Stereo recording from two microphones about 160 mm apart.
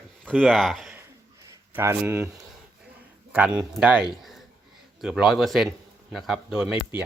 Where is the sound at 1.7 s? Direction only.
15° right (ahead or behind).